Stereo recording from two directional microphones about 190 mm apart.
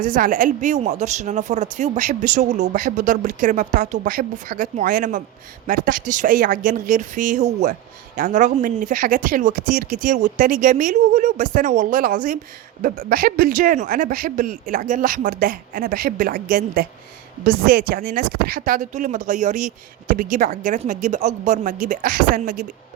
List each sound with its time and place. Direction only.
0.0 s speech: 45° right (ahead or behind)